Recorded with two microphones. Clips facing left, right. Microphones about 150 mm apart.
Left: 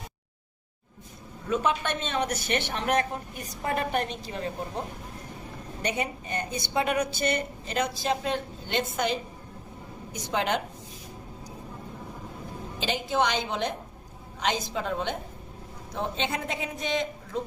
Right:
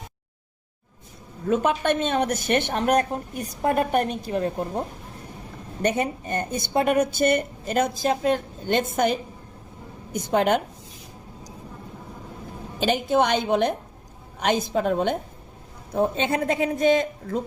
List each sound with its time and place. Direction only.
1.5 s speech: 50° right (ahead or behind)
5.8 s speech: 50° right (ahead or behind)
12.8 s speech: 50° right (ahead or behind)